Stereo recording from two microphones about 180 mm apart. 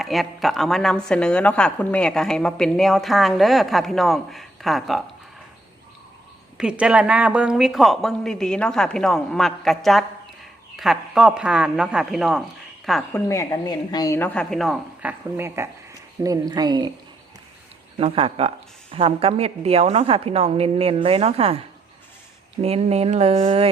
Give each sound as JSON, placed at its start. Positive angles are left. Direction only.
{"t": 0.0, "sound": "a woman's voice", "side_deg": 0}
{"t": 6.6, "sound": "a woman's voice", "side_deg": -5}
{"t": 13.1, "sound": "a woman's voice", "side_deg": 15}
{"t": 15.4, "sound": "speech", "side_deg": -15}
{"t": 17.9, "sound": "a woman's voice", "side_deg": -30}
{"t": 22.6, "sound": "a woman's voice", "side_deg": -35}